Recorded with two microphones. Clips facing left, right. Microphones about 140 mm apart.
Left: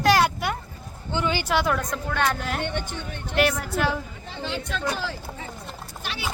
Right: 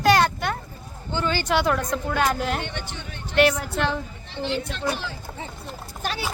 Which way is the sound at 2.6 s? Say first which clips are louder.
Left 4 dB; 50° left (ahead or behind).